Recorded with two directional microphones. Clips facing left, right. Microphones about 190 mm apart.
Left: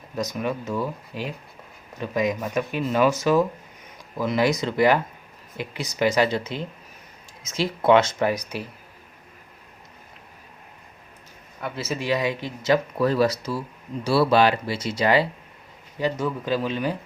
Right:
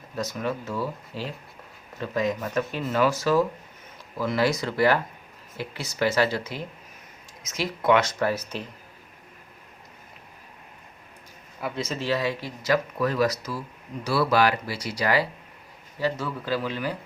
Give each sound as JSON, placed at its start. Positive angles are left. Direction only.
{"t": 0.2, "sound": "speech", "side_deg": 15}
{"t": 11.6, "sound": "speech", "side_deg": 5}